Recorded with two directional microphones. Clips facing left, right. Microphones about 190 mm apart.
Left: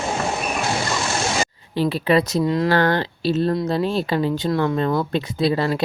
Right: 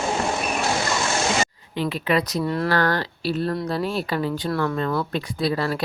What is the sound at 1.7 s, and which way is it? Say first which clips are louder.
Speech: left 5 dB; 30° left (ahead or behind).